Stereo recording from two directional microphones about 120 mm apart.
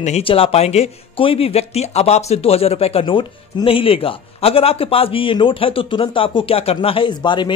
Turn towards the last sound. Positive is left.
turn(degrees=40)  # may be behind; listen again after turning